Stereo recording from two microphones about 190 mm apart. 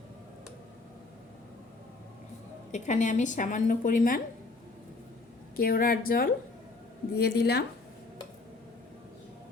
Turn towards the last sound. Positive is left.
turn(degrees=60)  # may be behind; listen again after turning